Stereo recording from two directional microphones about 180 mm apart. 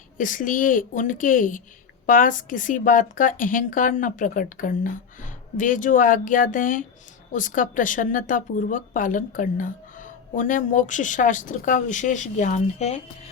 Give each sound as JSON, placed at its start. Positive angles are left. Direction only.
{"t": 0.2, "sound": "speech", "side_deg": 45}